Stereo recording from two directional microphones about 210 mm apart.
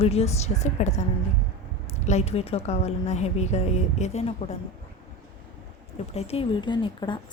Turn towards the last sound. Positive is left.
turn(degrees=20)  # may be behind; listen again after turning